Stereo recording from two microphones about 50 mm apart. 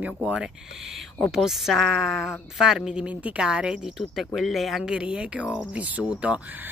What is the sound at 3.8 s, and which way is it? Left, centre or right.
Speech, centre.